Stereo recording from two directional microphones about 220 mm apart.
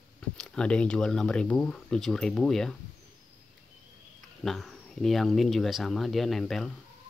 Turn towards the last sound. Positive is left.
turn(degrees=0)  # may be behind; listen again after turning